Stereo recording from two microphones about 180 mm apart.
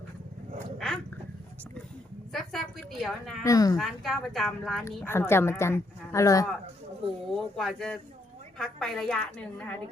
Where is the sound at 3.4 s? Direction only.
20° left (ahead or behind).